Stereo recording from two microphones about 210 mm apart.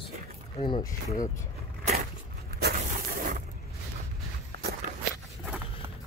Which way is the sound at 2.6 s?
45° right (ahead or behind).